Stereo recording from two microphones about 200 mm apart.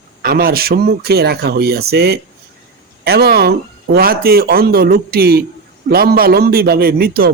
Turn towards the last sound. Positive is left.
turn(degrees=-50)  # may be behind; listen again after turning